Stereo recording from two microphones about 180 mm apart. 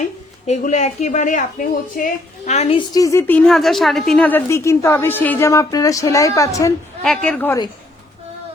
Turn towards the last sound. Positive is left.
turn(degrees=10)  # may be behind; listen again after turning